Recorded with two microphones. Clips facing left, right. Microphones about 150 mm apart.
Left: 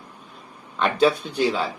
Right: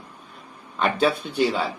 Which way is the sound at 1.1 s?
55° right (ahead or behind).